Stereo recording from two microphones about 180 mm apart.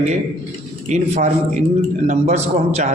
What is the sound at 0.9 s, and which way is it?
A man's voice, 40° right (ahead or behind).